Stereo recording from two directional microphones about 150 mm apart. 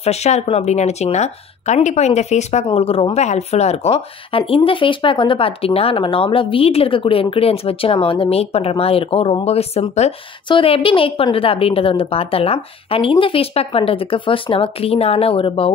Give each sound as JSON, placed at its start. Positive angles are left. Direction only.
{"t": 0.0, "sound": "speech", "side_deg": 45}